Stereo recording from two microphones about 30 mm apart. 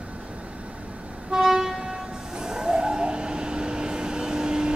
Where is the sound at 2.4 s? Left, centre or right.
Right.